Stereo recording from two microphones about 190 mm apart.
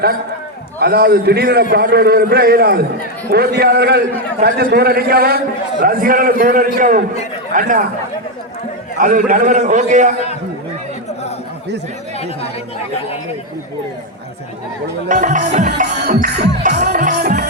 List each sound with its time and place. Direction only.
0.8 s a man's voice: 55° right (ahead or behind)
5.8 s music: 50° right (ahead or behind)
9.0 s a man's voice: 40° right (ahead or behind)
15.1 s a man's voice: 40° right (ahead or behind)
15.8 s music: 55° right (ahead or behind)
16.8 s music: 40° right (ahead or behind)